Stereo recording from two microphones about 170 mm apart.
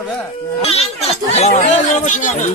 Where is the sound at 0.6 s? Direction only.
35° left (ahead or behind).